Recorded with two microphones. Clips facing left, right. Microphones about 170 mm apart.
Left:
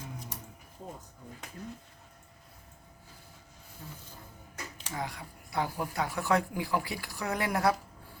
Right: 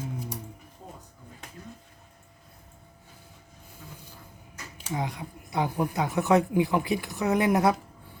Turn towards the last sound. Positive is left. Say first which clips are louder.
# right 6 dB
turn(degrees=-20)  # may be behind; listen again after turning